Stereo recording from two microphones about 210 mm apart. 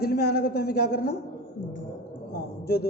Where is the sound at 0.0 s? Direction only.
50° left (ahead or behind).